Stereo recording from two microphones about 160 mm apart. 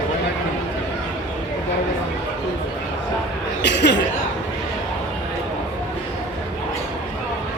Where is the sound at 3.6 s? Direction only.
90° left.